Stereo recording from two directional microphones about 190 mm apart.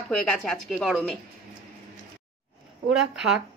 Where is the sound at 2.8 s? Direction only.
5° right (ahead or behind).